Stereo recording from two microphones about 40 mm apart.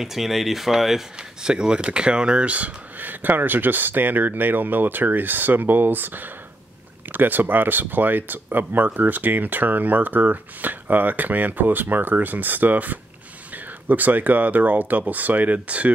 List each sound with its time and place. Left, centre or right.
0.0 s speech: centre
1.4 s speech: right
2.5 s speech: right